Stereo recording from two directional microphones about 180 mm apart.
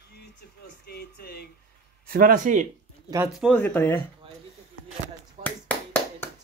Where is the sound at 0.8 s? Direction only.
60° left (ahead or behind).